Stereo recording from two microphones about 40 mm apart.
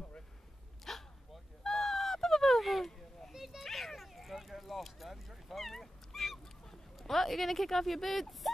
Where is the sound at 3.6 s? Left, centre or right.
Centre.